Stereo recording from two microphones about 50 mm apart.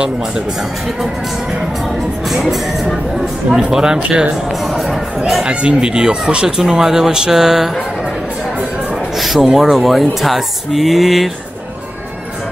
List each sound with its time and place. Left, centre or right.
2.2 s speech: centre
4.6 s speech: centre
5.5 s speech: centre
9.2 s speech: centre